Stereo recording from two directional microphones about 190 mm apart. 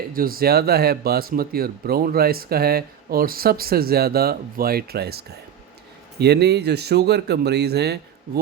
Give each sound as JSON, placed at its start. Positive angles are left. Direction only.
{"t": 0.1, "sound": "speech", "side_deg": -50}